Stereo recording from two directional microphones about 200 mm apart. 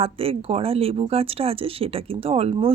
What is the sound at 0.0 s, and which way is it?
Speech, 30° right (ahead or behind).